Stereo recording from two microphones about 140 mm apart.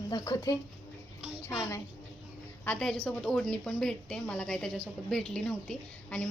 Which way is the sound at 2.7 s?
5° left (ahead or behind).